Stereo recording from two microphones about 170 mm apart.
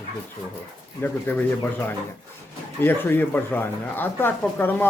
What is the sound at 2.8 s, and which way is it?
Speech, 10° left (ahead or behind).